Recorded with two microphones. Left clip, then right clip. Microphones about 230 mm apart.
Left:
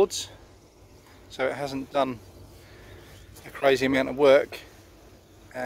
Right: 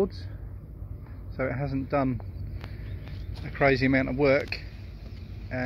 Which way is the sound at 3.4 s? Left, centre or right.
Left.